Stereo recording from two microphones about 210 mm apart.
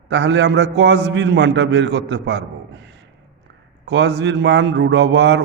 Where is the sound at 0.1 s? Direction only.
60° right (ahead or behind).